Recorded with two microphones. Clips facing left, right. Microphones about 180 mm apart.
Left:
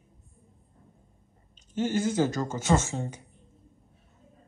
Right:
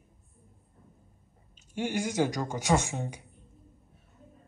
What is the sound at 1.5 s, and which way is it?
Speech, 10° right (ahead or behind).